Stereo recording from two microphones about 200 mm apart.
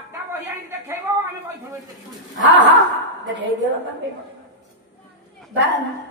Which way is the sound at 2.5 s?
65° right (ahead or behind).